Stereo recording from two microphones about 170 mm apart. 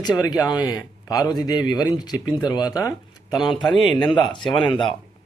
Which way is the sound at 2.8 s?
20° left (ahead or behind).